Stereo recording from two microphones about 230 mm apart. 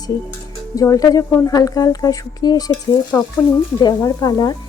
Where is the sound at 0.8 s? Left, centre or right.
Centre.